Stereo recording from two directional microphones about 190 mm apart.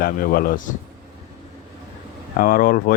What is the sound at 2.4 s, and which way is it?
Speech, 45° left (ahead or behind).